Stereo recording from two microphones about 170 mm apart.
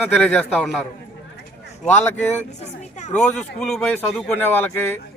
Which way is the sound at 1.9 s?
10° left (ahead or behind).